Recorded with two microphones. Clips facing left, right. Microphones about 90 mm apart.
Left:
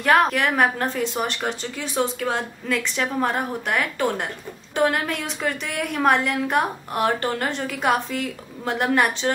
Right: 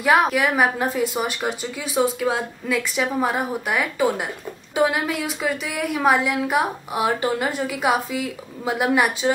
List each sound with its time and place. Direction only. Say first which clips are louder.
0.0 s a woman's voice: right 1 dB; 5° right (ahead or behind)